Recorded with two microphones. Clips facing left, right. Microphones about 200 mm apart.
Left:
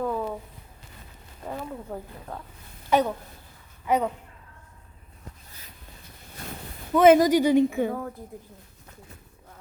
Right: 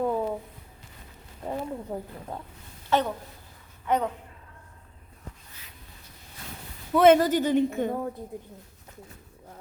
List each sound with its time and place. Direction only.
0.0 s a sound: 25° right (ahead or behind)
1.5 s speech: 15° right (ahead or behind)
2.9 s a woman's voice: 10° left (ahead or behind)
7.0 s a woman's voice: 10° left (ahead or behind)